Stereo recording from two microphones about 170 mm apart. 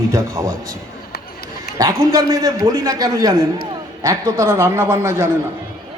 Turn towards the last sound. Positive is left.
turn(degrees=-15)  # may be behind; listen again after turning